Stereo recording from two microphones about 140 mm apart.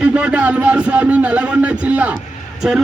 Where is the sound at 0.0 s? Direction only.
10° right (ahead or behind).